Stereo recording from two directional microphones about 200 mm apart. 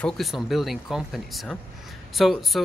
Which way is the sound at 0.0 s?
Centre (ahead or behind).